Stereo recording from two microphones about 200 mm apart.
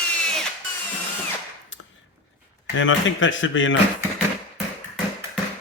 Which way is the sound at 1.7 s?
70° left (ahead or behind).